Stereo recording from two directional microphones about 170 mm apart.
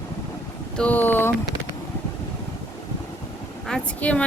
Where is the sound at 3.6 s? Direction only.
5° left (ahead or behind).